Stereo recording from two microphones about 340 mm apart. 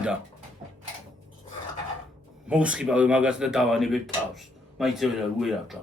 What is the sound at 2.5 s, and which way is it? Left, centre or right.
Speech, centre.